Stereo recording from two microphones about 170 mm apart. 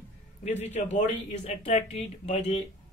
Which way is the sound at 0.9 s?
40° left (ahead or behind).